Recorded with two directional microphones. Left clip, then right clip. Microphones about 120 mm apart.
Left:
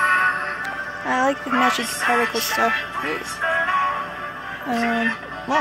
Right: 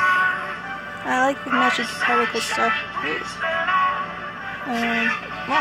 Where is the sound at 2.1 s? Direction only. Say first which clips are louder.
Left 1 dB; 35° left (ahead or behind).